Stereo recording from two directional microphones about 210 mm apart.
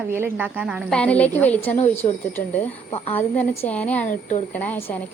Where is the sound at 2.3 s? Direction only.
10° left (ahead or behind).